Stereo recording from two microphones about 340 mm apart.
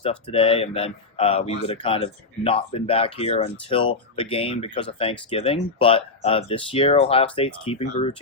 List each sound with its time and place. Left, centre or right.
0.0 s speech: centre